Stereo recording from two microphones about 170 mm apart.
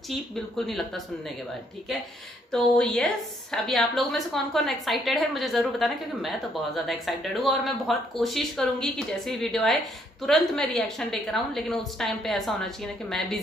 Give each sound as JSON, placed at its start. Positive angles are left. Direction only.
{"t": 0.7, "sound": "a woman's voice", "side_deg": 0}
{"t": 2.5, "sound": "a woman's voice", "side_deg": 5}